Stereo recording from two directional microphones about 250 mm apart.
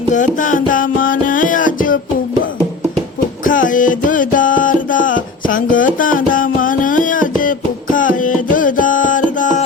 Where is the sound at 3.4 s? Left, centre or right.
Left.